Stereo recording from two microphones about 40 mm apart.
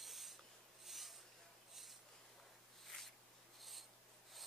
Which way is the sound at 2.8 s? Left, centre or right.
Centre.